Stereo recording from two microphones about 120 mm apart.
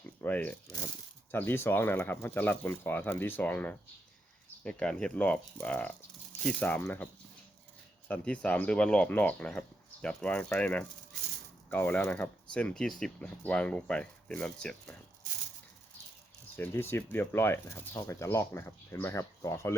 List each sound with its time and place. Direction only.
0.2 s speech: 15° left (ahead or behind)
16.6 s speech: 20° left (ahead or behind)